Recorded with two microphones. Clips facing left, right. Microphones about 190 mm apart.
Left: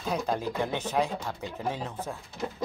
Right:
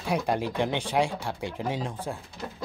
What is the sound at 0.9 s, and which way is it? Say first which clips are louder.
Speech: right 2 dB; 10° right (ahead or behind).